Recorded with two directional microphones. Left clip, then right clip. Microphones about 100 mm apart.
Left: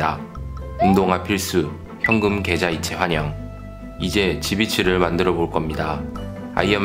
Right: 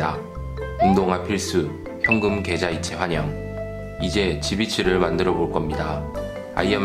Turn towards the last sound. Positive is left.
turn(degrees=20)  # may be behind; listen again after turning